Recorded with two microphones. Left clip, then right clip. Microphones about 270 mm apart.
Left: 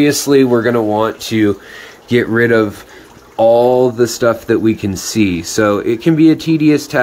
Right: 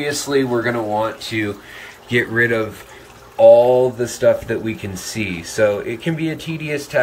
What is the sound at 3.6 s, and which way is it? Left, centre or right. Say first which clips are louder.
Speech: left 3 dB; left.